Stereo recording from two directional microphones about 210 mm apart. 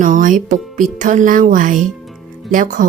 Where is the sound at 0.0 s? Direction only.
40° right (ahead or behind).